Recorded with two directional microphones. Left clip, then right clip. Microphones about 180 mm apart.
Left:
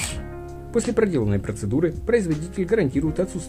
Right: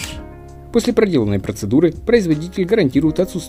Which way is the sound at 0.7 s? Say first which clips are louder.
Right 6 dB; 20° right (ahead or behind).